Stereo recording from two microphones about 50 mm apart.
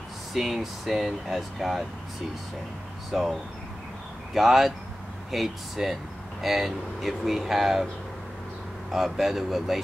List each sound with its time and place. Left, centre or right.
0.3 s speech: centre
3.1 s speech: centre
8.9 s speech: centre